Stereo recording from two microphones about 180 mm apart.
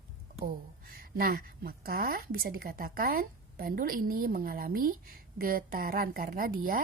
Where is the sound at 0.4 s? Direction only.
55° right (ahead or behind).